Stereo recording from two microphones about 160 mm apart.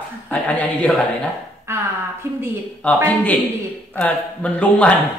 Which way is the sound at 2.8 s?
10° left (ahead or behind).